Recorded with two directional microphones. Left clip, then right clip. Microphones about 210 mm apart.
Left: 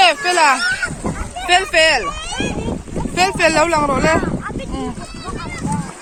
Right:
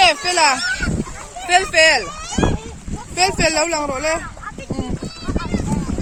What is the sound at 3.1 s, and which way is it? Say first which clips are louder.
Speech: left 3 dB; 10° right (ahead or behind).